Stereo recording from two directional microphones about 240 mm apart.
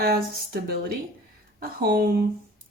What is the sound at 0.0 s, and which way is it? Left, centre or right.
Speech, right.